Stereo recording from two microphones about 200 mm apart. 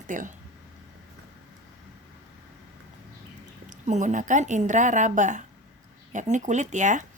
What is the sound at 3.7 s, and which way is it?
A woman's voice, 35° right (ahead or behind).